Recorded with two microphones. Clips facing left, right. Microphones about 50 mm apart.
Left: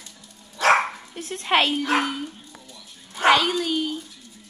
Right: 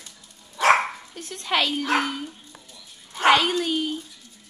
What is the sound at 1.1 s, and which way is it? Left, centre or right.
Speech, left.